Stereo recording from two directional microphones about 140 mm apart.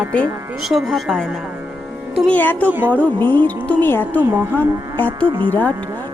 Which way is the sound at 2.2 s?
15° left (ahead or behind).